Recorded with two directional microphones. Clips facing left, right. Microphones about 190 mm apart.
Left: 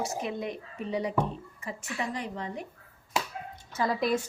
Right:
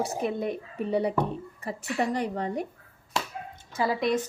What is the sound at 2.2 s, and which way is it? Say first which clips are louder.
Speech: right 6 dB; 40° right (ahead or behind).